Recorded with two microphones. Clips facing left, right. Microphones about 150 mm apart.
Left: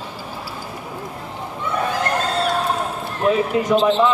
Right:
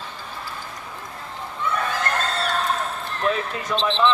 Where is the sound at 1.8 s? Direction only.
10° left (ahead or behind).